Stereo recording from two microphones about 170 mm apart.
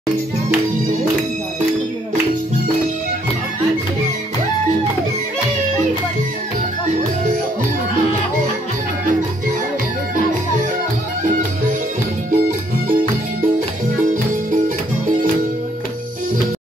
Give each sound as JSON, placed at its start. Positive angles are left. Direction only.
{"t": 12.3, "sound": "music", "side_deg": -50}
{"t": 14.0, "sound": "music", "side_deg": -50}